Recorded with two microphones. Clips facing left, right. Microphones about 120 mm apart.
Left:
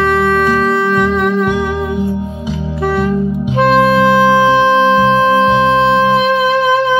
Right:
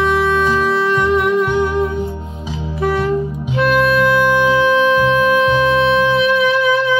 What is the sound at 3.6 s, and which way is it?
Music, 35° left (ahead or behind).